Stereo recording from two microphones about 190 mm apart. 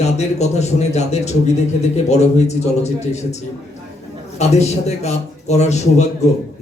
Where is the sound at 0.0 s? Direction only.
35° left (ahead or behind).